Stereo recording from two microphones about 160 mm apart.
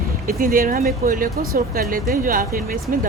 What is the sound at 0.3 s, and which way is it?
Speech, 60° right (ahead or behind).